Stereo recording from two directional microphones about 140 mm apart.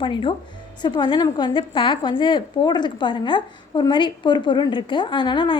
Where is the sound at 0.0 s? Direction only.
35° left (ahead or behind).